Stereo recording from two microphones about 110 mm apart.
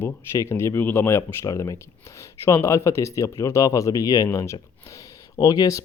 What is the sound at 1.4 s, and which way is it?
Speech, 35° left (ahead or behind).